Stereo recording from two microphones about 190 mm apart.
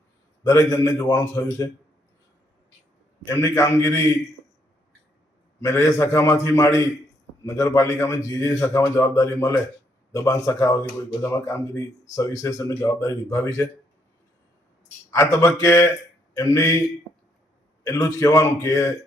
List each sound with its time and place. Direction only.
0.4 s speech: 15° left (ahead or behind)
3.2 s speech: 15° left (ahead or behind)
5.6 s speech: 15° left (ahead or behind)
15.1 s a man's voice: 15° left (ahead or behind)
17.8 s speech: 20° left (ahead or behind)